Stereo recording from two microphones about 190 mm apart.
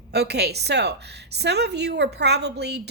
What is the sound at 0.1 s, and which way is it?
A woman's voice, 60° right (ahead or behind).